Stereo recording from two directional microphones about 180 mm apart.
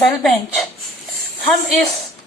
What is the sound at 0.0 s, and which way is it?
A woman's voice, centre (ahead or behind).